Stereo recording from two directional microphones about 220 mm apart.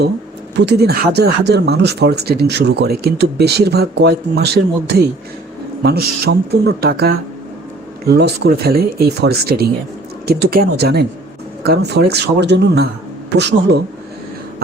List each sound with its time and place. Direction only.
0.5 s speech: 50° right (ahead or behind)